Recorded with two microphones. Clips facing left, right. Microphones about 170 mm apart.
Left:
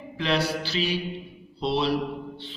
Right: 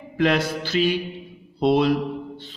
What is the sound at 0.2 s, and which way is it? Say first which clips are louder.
A man's voice: right 5 dB; 50° right (ahead or behind).